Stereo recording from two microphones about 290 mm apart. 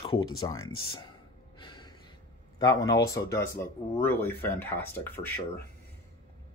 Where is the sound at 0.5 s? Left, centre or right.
Left.